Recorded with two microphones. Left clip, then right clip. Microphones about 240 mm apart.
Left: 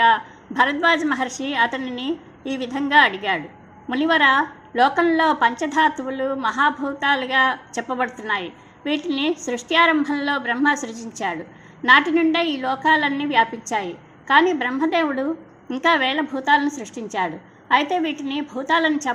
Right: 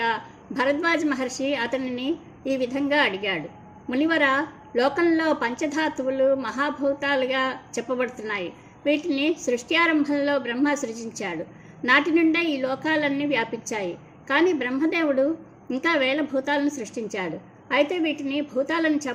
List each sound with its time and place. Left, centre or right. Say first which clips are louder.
0.0 s a woman's voice: left 9 dB; centre
2.0 s a woman's voice: left 1 dB; right
2.5 s a woman's voice: left 3 dB; centre